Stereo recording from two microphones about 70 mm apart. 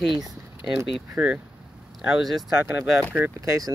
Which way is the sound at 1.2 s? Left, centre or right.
Centre.